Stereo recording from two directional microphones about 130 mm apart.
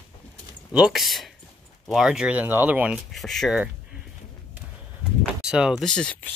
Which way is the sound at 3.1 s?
Centre (ahead or behind).